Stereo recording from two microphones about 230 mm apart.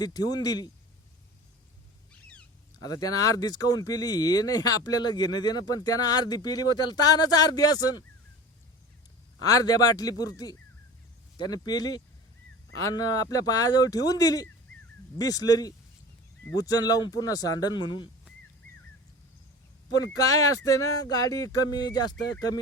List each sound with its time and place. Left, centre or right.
0.0 s speech: centre
2.8 s speech: centre
9.4 s speech: centre
20.0 s speech: centre